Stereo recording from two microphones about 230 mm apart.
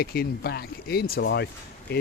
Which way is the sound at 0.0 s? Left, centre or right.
Left.